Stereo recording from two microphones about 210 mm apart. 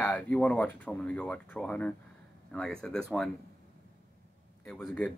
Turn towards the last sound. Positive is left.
turn(degrees=5)  # may be behind; listen again after turning